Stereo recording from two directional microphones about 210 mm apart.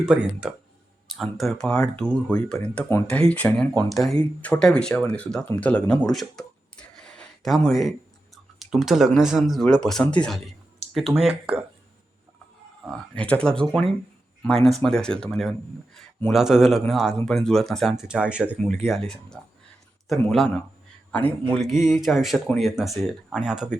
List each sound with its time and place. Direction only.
0.0 s speech: 5° right (ahead or behind)
11.2 s speech: 25° right (ahead or behind)
12.8 s speech: 5° left (ahead or behind)